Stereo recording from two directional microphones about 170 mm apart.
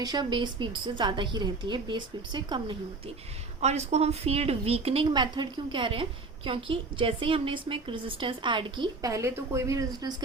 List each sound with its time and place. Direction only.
0.0 s a woman's voice: 25° right (ahead or behind)
3.6 s a woman's voice: 40° right (ahead or behind); by 10.2 s 25° right (ahead or behind)